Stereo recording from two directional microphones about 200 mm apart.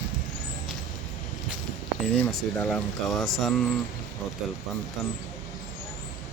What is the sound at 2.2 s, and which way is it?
Speech, centre (ahead or behind).